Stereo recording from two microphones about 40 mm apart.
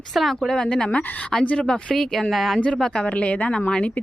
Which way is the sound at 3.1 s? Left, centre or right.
Left.